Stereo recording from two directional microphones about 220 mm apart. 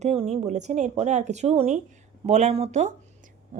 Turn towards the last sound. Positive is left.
turn(degrees=-35)  # may be behind; listen again after turning